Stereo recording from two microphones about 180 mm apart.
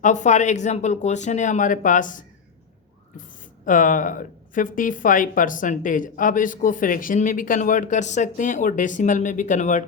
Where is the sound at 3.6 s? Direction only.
45° left (ahead or behind).